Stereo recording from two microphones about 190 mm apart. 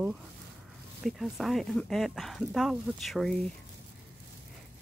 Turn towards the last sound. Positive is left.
turn(degrees=0)  # may be behind; listen again after turning